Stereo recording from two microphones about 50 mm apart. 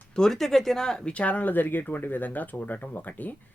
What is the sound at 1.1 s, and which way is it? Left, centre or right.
Speech, left.